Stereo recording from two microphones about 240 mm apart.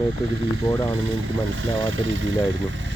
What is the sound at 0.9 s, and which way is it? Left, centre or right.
Speech, right.